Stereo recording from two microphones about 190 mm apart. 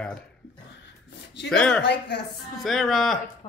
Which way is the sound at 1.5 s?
5° left (ahead or behind).